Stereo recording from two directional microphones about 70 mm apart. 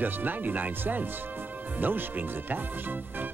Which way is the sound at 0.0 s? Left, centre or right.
Right.